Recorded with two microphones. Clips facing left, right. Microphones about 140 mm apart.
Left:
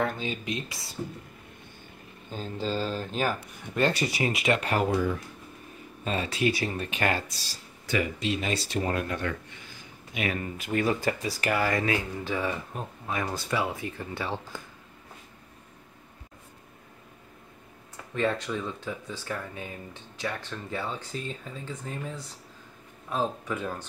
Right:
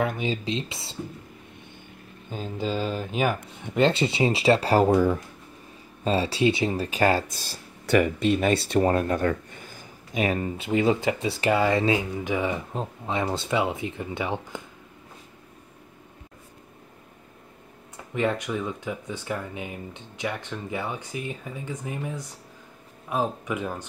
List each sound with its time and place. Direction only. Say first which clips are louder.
0.2 s speech: right 5 dB; 25° right (ahead or behind)
2.3 s speech: right 2 dB; 10° right (ahead or behind)
6.9 s speech: right 7 dB; 35° right (ahead or behind)
7.2 s speech: right 5 dB; 50° right (ahead or behind)
8.8 s speech: right 6 dB; 35° right (ahead or behind)
10.4 s speech: right 5 dB; 25° right (ahead or behind)
17.9 s speech: right 2 dB; 15° right (ahead or behind)